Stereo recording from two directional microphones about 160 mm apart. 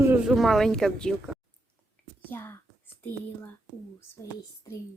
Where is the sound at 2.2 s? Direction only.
15° left (ahead or behind).